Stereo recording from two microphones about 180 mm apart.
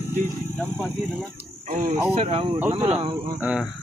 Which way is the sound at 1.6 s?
45° right (ahead or behind).